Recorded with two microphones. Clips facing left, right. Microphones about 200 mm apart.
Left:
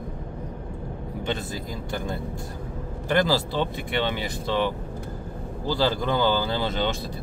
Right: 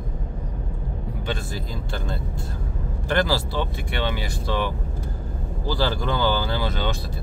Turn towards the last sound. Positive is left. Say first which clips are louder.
# left 1 dB
turn(degrees=20)  # may be behind; listen again after turning